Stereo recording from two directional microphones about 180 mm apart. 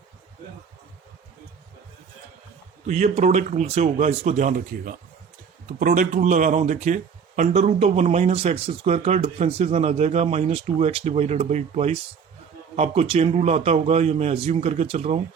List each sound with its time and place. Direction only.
2.8 s speech: 40° right (ahead or behind)